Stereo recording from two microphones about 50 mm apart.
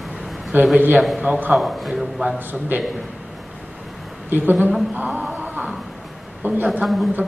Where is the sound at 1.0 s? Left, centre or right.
Centre.